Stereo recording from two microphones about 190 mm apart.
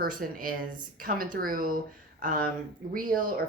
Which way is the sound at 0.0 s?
50° right (ahead or behind).